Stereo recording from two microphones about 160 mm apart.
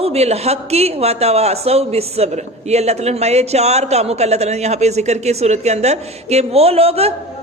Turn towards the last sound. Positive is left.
turn(degrees=-40)  # may be behind; listen again after turning